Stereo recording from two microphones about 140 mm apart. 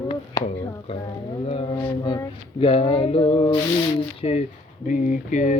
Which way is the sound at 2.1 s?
35° left (ahead or behind).